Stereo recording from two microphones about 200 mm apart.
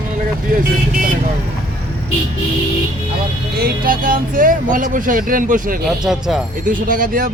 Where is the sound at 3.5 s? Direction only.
45° right (ahead or behind).